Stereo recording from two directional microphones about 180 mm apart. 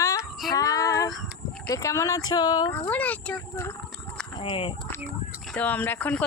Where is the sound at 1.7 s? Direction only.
15° left (ahead or behind).